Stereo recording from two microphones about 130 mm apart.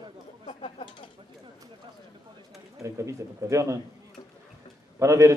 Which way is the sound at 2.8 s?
25° right (ahead or behind).